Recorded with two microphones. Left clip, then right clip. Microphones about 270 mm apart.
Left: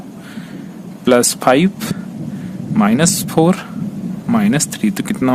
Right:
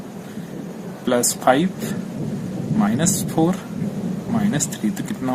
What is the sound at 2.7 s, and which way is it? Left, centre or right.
Speech, left.